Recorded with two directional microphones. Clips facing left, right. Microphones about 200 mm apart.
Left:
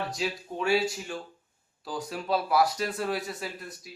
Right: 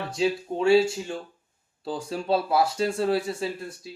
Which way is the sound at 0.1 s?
25° right (ahead or behind).